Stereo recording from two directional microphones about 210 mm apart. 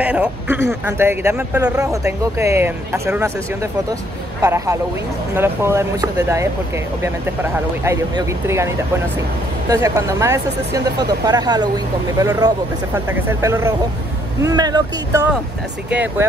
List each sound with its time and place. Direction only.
0.0 s a man's voice: 5° right (ahead or behind)
4.4 s speech: 15° right (ahead or behind)
9.7 s speech: 15° right (ahead or behind)
15.9 s speech: 5° right (ahead or behind)